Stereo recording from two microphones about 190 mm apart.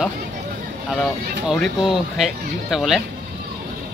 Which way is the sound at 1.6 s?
Centre (ahead or behind).